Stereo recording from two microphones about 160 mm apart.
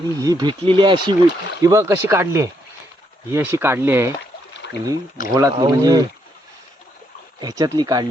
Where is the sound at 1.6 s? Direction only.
20° right (ahead or behind).